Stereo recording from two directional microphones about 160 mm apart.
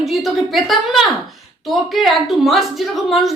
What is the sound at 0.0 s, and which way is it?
A woman's voice, centre (ahead or behind).